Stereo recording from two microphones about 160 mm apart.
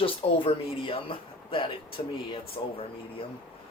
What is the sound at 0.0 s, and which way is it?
Speech, 35° left (ahead or behind).